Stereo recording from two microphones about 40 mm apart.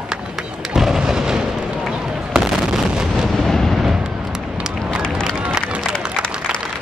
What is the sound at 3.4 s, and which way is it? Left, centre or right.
Artillery fire, centre.